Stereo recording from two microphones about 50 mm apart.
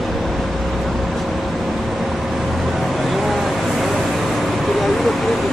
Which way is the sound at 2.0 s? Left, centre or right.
Centre.